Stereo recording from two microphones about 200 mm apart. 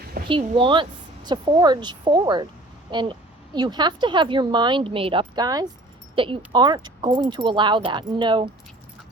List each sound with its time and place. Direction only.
0.3 s a woman's voice: 25° right (ahead or behind)